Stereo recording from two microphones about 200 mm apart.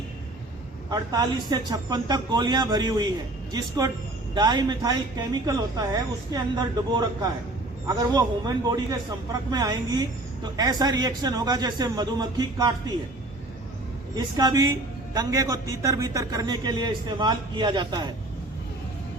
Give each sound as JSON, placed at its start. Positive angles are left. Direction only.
{"t": 0.9, "sound": "a woman's voice", "side_deg": -20}
{"t": 14.2, "sound": "a woman's voice", "side_deg": -20}